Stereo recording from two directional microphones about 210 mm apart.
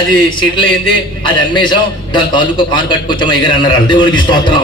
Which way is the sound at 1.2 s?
25° left (ahead or behind).